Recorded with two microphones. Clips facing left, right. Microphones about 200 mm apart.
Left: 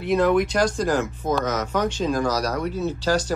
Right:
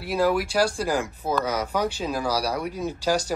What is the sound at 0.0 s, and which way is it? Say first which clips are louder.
Speech: left 4 dB; 5° right (ahead or behind).